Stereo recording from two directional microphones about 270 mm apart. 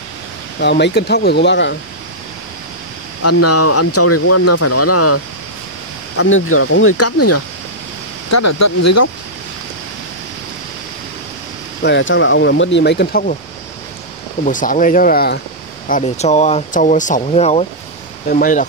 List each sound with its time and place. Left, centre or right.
0.6 s speech: left
3.2 s speech: left
8.3 s speech: left
11.8 s speech: left
14.4 s speech: left
15.9 s speech: left